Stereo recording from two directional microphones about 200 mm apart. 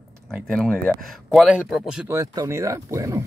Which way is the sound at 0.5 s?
5° left (ahead or behind).